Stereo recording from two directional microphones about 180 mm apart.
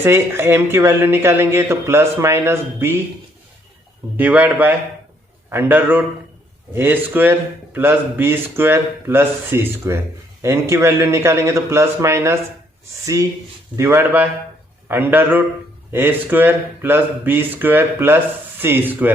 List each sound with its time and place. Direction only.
0.0 s a man's voice: 15° right (ahead or behind)
4.2 s a man's voice: 10° right (ahead or behind)
13.7 s a man's voice: 15° right (ahead or behind)